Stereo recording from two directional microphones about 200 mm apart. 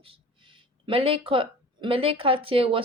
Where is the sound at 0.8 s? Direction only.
30° right (ahead or behind).